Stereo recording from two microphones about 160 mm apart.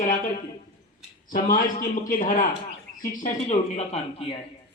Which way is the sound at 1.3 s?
60° left (ahead or behind).